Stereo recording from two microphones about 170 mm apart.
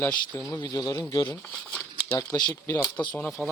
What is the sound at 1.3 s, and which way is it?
Crumpling, 5° left (ahead or behind).